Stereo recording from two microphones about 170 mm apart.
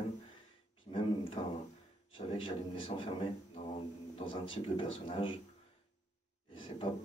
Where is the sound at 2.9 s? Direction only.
35° left (ahead or behind).